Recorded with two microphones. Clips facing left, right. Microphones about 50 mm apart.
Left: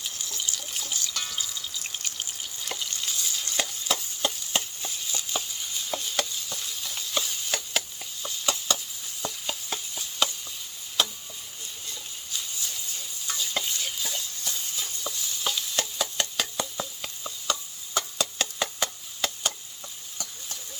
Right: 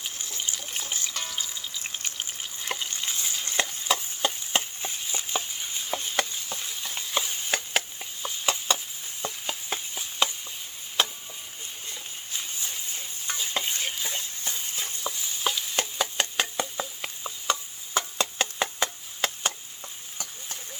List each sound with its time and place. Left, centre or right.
0.0 s water: right
2.6 s stir: right
9.2 s chopping: right
11.9 s stir: right
15.4 s a sound: right